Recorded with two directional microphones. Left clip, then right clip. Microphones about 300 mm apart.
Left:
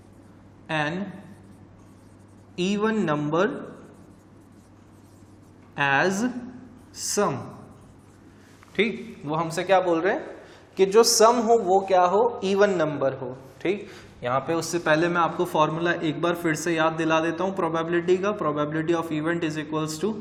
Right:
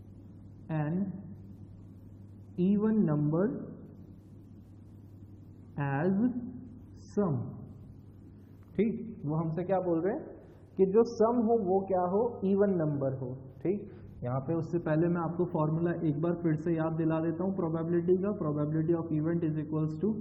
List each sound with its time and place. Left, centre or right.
0.7 s a man's voice: centre
2.6 s a man's voice: centre
5.7 s a woman's voice: centre
9.1 s a man's voice: centre